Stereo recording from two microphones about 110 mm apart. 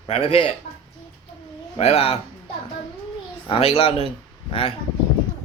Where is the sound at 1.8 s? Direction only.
75° left (ahead or behind).